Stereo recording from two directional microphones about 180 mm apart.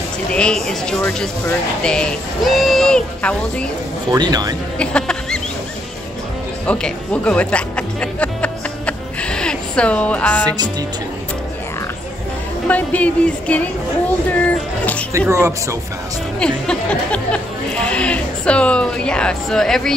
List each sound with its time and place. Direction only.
0.3 s speech: 5° left (ahead or behind)
4.1 s a man's voice: 20° right (ahead or behind)
4.7 s a sound: 5° left (ahead or behind)
6.6 s music: 5° left (ahead or behind)
12.6 s speech: 10° left (ahead or behind)
15.1 s speech: 15° right (ahead or behind)
16.3 s speech: 5° left (ahead or behind)